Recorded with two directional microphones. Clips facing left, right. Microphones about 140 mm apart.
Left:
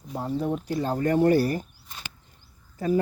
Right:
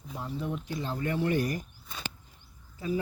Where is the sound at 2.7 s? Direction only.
50° left (ahead or behind).